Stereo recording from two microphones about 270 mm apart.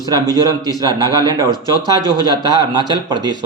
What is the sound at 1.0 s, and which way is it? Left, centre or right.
Speech, centre.